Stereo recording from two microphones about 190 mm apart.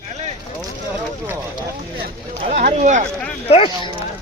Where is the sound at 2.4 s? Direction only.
45° right (ahead or behind).